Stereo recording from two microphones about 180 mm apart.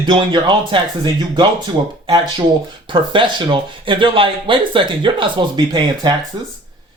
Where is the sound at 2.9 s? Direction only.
25° right (ahead or behind).